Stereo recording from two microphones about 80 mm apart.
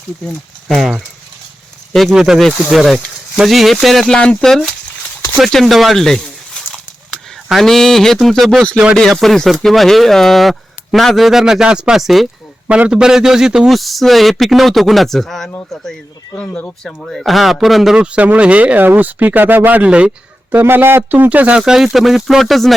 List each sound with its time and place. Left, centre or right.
0.3 s a man's voice: centre
4.1 s a man's voice: centre
12.6 s a man's voice: centre
16.4 s speech: centre
17.0 s a man's voice: centre
20.6 s speech: right
21.6 s a man's voice: centre